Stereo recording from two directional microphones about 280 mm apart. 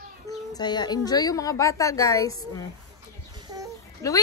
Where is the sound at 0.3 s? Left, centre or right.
Centre.